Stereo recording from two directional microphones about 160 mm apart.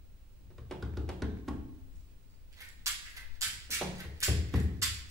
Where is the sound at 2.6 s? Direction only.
20° right (ahead or behind).